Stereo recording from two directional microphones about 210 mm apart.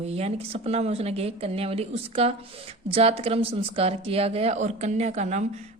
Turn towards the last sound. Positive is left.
turn(degrees=-30)  # may be behind; listen again after turning